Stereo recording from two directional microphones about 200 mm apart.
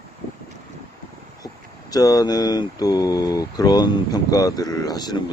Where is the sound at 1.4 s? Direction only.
20° left (ahead or behind).